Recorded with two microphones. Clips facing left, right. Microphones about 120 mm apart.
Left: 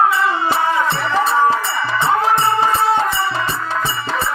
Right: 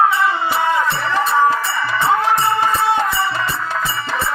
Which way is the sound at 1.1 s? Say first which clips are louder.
Even; 25° left (ahead or behind).